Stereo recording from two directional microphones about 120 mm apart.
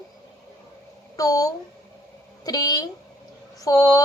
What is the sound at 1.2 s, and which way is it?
A woman's voice, 30° left (ahead or behind).